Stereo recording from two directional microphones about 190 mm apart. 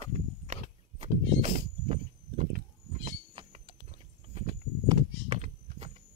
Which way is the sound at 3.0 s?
40° right (ahead or behind).